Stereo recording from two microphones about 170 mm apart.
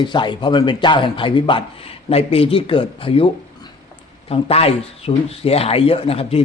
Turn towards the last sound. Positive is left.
turn(degrees=35)  # may be behind; listen again after turning